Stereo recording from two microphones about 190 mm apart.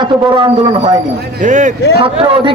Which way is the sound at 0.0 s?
25° right (ahead or behind).